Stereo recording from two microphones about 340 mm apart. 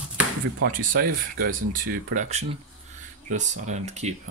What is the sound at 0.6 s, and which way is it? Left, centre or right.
Speech, right.